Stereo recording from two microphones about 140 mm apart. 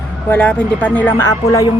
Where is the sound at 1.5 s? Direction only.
25° left (ahead or behind).